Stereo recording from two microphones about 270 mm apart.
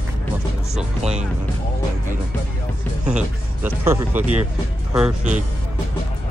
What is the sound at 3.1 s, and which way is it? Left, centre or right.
Music, centre.